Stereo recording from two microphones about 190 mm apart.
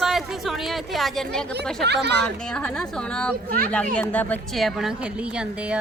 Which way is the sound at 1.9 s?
60° right (ahead or behind).